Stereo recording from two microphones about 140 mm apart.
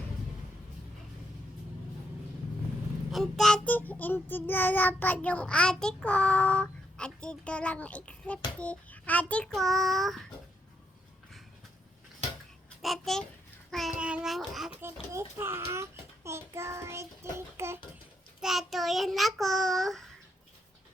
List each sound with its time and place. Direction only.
3.1 s child singing: centre (ahead or behind)
12.8 s a child's voice: centre (ahead or behind)
13.7 s child singing: centre (ahead or behind)
15.1 s a child's voice: 15° right (ahead or behind)
18.3 s child singing: centre (ahead or behind)